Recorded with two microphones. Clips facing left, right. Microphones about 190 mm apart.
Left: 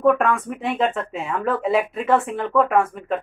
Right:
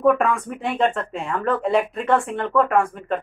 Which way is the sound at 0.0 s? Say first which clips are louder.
Even; centre (ahead or behind).